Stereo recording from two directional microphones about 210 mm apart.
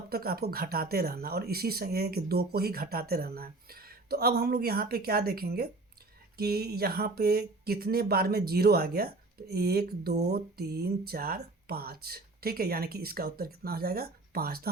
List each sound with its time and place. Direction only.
0.1 s speech: 45° right (ahead or behind)